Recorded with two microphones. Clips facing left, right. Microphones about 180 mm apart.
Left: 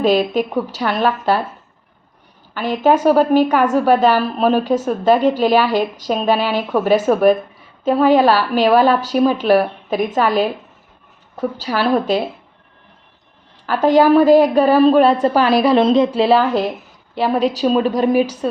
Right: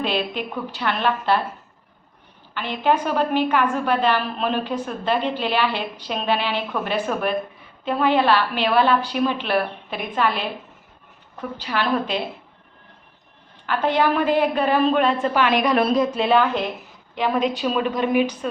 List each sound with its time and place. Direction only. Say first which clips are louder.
0.0 s a woman's voice: left 9 dB; 40° left (ahead or behind)
2.6 s a woman's voice: left 6 dB; 40° left (ahead or behind)
13.8 s a woman's voice: left 9 dB; 40° left (ahead or behind)